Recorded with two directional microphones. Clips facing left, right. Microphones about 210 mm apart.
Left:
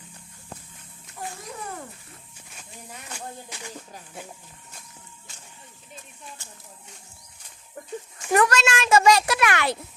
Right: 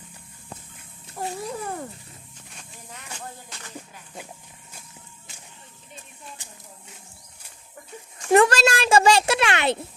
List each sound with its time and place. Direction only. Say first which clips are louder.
1.2 s babbling: right 5 dB; 35° right (ahead or behind)
2.5 s speech: left 2 dB; 5° left (ahead or behind)
6.4 s a sound: even; 15° right (ahead or behind)
8.3 s a child's voice: right 4 dB; 25° right (ahead or behind)